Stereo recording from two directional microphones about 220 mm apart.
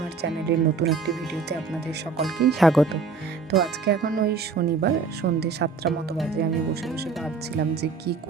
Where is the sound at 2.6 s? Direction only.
Centre (ahead or behind).